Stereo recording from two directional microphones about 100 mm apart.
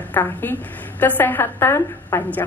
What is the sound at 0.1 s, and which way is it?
Speech, 20° left (ahead or behind).